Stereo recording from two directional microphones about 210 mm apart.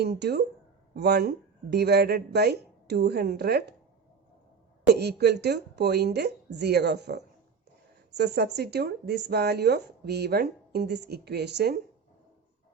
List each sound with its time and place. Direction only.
0.0 s speech: 50° right (ahead or behind)
4.9 s speech: 50° right (ahead or behind)